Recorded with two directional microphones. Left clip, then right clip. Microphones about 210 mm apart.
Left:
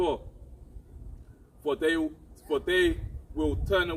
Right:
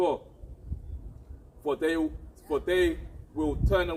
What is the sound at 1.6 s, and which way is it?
A man's voice, 25° left (ahead or behind).